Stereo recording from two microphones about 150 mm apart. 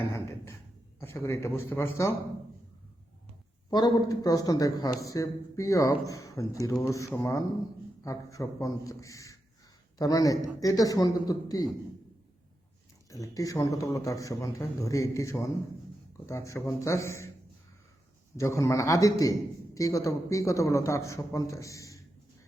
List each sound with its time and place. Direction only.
0.9 s a man's voice: 20° left (ahead or behind)
3.7 s a man's voice: 30° left (ahead or behind)
13.1 s a man's voice: 20° left (ahead or behind)
18.3 s a man's voice: 20° left (ahead or behind)